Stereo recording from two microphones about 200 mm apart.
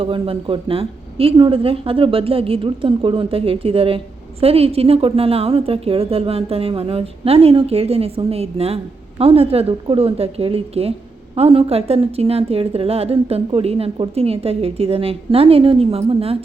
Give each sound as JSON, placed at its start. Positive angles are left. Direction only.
{"t": 0.0, "sound": "speech", "side_deg": -25}